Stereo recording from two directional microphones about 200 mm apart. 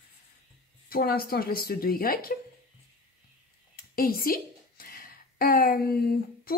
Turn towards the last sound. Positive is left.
turn(degrees=50)  # may be behind; listen again after turning